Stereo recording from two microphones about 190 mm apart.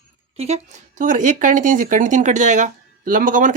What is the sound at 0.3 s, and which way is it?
Speech, 35° right (ahead or behind).